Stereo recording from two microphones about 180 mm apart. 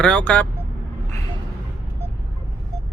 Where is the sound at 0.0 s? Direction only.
5° left (ahead or behind).